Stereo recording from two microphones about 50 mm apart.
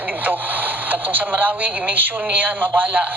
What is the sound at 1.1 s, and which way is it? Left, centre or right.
Speech, right.